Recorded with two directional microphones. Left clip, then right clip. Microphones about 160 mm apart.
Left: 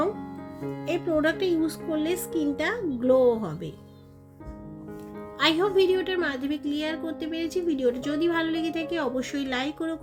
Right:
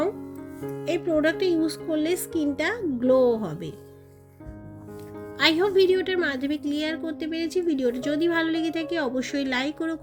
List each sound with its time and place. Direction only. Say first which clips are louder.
0.9 s a woman's voice: right 2 dB; 35° right (ahead or behind)
5.4 s a woman's voice: right 2 dB; 30° right (ahead or behind)